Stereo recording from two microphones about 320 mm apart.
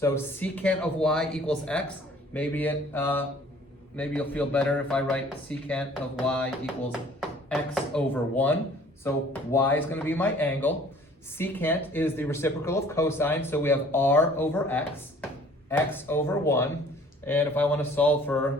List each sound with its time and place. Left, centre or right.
0.0 s speech: centre